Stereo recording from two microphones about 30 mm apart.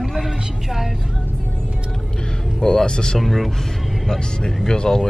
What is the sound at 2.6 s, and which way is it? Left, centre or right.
Speech, left.